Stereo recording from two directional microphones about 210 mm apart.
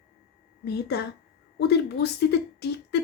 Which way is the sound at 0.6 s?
50° left (ahead or behind).